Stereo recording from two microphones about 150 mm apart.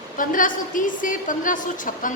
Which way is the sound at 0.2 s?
65° left (ahead or behind).